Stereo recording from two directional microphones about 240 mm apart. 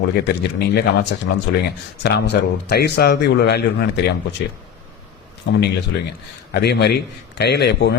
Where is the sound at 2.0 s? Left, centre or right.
Left.